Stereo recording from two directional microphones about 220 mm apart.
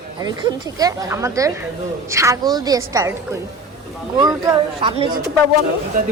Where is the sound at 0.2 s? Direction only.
15° right (ahead or behind).